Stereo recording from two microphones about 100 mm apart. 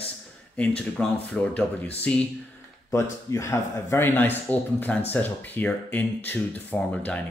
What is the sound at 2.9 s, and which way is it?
A man's voice, 30° left (ahead or behind).